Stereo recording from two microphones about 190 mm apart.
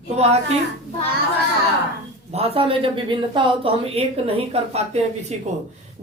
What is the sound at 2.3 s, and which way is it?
Speech, 30° right (ahead or behind).